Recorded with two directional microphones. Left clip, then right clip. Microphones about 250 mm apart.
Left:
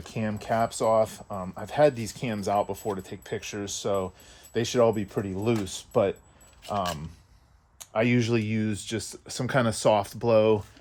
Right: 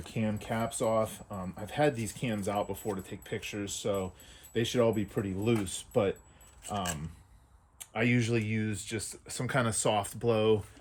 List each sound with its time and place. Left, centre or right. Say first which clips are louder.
0.0 s speech: left 3 dB; left
6.7 s speech: left 6 dB; centre
7.8 s speech: left 5 dB; left